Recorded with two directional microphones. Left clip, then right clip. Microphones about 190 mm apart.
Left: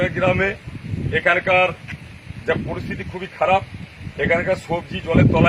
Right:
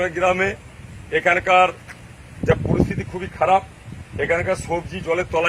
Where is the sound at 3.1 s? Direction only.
10° right (ahead or behind).